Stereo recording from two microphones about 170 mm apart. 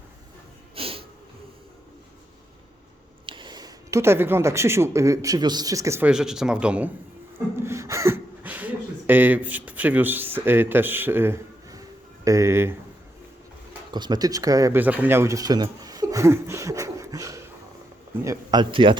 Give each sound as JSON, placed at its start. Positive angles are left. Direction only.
{"t": 0.8, "sound": "snort", "side_deg": -35}
{"t": 3.2, "sound": "speech", "side_deg": -30}
{"t": 6.1, "sound": "speech", "side_deg": -5}
{"t": 7.3, "sound": "a sound", "side_deg": -15}
{"t": 12.2, "sound": "speech", "side_deg": -20}
{"t": 13.9, "sound": "a man's voice", "side_deg": -25}